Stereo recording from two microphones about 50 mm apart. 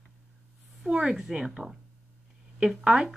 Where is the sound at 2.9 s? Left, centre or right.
Centre.